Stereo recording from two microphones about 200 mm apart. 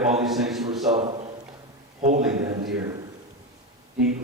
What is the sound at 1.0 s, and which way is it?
Speech, 30° right (ahead or behind).